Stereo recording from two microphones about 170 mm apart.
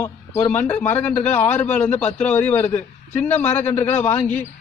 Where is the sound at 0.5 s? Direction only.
10° left (ahead or behind).